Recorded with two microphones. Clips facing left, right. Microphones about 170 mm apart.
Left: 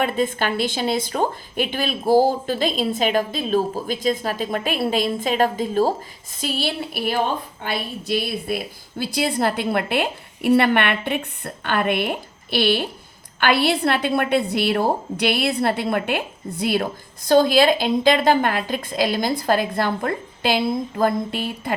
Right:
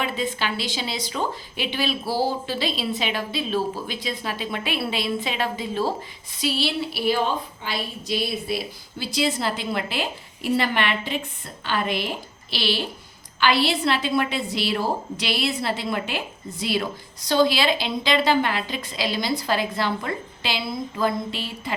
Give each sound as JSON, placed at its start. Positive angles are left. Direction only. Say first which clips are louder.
{"t": 0.0, "sound": "a woman's voice", "louder": "left 5 dB", "side_deg": 50}